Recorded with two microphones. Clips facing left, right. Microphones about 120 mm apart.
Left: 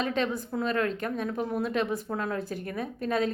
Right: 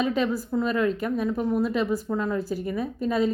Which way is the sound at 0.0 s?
5° right (ahead or behind).